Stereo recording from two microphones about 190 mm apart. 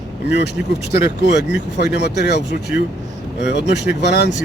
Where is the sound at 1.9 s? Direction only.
65° left (ahead or behind).